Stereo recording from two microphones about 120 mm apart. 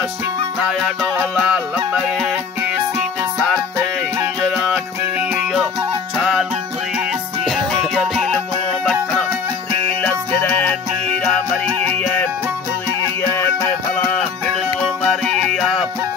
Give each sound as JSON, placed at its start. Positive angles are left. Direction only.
{"t": 0.6, "sound": "music", "side_deg": -5}
{"t": 2.0, "sound": "music", "side_deg": 0}
{"t": 7.4, "sound": "music", "side_deg": 0}
{"t": 13.3, "sound": "music", "side_deg": 25}
{"t": 13.9, "sound": "music", "side_deg": 10}